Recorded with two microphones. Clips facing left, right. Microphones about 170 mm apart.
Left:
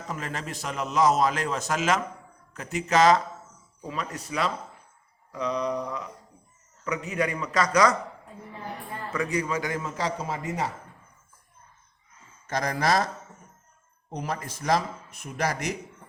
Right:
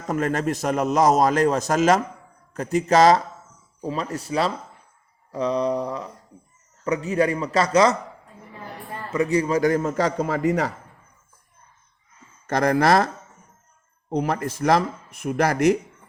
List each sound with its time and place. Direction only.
0.1 s a man's voice: 50° right (ahead or behind)
2.5 s mantra: 35° right (ahead or behind)
6.8 s a man's voice: 30° right (ahead or behind)
9.1 s a man's voice: 30° right (ahead or behind); by 10.7 s 65° right (ahead or behind)
12.5 s speech: 60° right (ahead or behind)
14.1 s speech: 60° right (ahead or behind)